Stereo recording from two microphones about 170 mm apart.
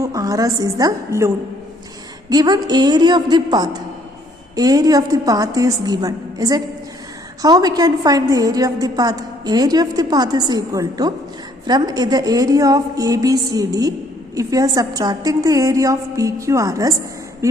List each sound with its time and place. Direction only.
0.0 s a woman's voice: 20° right (ahead or behind)
2.3 s a woman's voice: 25° right (ahead or behind)